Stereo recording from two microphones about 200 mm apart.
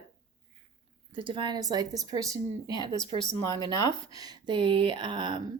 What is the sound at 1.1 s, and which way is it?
Speech, 25° right (ahead or behind).